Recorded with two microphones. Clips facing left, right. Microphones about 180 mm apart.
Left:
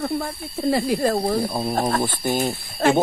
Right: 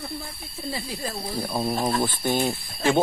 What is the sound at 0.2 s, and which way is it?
Speech, 65° left (ahead or behind).